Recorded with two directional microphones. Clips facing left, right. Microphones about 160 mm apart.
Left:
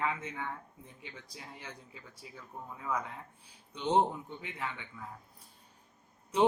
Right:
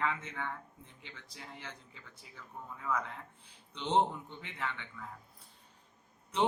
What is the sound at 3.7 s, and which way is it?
Speech, 10° left (ahead or behind).